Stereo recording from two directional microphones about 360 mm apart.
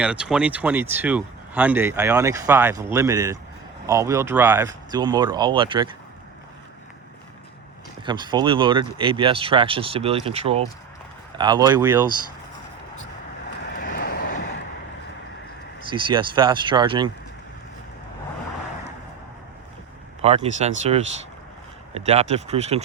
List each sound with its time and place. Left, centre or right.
0.0 s speech: centre
8.0 s speech: centre
13.7 s vehicle: left
15.9 s speech: centre
20.2 s speech: centre